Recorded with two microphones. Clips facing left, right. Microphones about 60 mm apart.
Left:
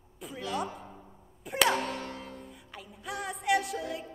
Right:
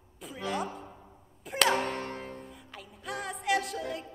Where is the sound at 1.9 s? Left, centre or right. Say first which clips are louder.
Right 2 dB; right.